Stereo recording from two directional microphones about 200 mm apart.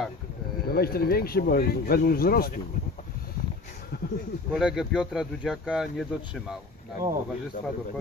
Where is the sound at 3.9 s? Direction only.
50° left (ahead or behind).